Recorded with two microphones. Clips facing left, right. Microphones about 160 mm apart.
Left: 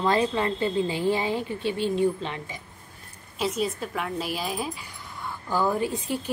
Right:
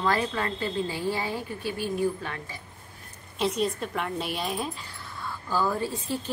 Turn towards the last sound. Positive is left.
turn(degrees=15)  # may be behind; listen again after turning